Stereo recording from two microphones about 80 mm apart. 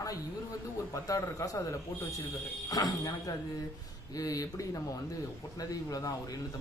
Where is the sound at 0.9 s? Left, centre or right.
Left.